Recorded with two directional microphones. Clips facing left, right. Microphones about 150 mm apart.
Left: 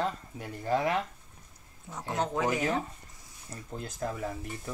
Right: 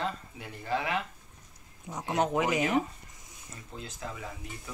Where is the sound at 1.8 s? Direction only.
20° right (ahead or behind).